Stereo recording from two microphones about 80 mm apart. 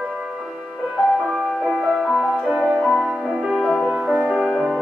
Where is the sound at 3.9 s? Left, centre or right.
Centre.